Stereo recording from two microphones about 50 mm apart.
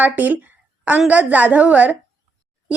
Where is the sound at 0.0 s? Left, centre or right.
Right.